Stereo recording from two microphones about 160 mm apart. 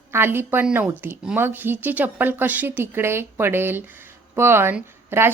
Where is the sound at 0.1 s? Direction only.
15° right (ahead or behind).